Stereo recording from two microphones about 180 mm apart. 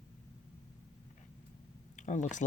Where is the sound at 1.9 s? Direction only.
45° left (ahead or behind).